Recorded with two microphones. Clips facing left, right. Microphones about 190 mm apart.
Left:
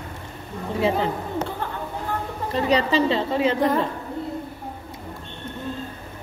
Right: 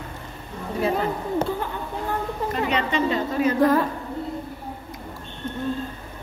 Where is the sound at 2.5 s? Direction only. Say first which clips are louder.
Left 5 dB; 35° left (ahead or behind).